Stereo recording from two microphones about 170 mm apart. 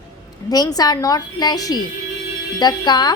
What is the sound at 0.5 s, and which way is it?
A woman's voice, 20° left (ahead or behind).